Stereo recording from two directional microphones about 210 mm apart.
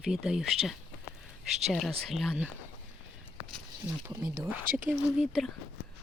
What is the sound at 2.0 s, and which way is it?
Speech, centre (ahead or behind).